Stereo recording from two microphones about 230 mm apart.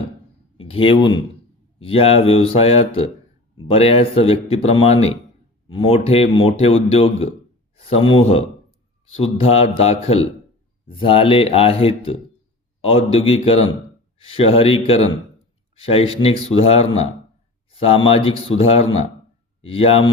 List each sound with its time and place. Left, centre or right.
0.5 s speech: left
7.8 s a man's voice: left